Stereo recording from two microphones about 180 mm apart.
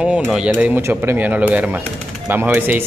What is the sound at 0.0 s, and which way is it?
Speech, 5° right (ahead or behind).